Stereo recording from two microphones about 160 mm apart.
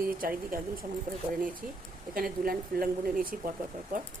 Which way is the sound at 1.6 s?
60° right (ahead or behind).